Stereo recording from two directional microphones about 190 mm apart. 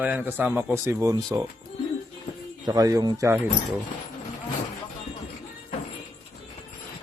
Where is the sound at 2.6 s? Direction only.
20° right (ahead or behind).